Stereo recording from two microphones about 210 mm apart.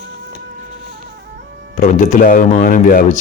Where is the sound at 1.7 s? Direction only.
35° left (ahead or behind).